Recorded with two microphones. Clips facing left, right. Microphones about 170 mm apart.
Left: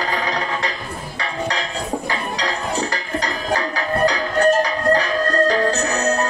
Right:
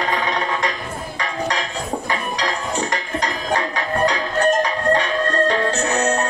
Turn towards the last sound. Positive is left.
turn(degrees=35)  # may be behind; listen again after turning